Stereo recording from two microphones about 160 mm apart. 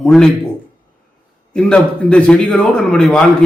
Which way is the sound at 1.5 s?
5° left (ahead or behind).